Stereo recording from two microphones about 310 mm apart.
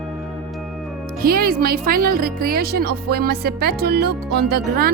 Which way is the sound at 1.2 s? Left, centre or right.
Right.